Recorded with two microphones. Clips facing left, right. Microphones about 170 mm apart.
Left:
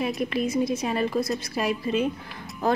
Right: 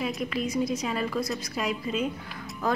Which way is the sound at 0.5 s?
25° left (ahead or behind).